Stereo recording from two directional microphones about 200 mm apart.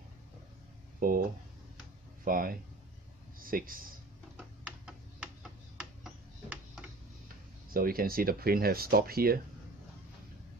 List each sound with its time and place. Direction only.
0.9 s speech: 45° right (ahead or behind)
2.2 s speech: 45° right (ahead or behind)
4.4 s tick-tock: 5° right (ahead or behind)
5.8 s a sound: 5° right (ahead or behind)
7.7 s speech: 45° right (ahead or behind)